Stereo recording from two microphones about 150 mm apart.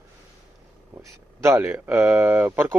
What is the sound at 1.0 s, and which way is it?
Speech, 20° right (ahead or behind).